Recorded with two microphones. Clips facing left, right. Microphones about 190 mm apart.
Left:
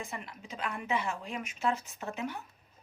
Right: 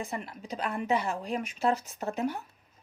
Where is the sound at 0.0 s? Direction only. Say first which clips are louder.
Right 5 dB; 35° right (ahead or behind).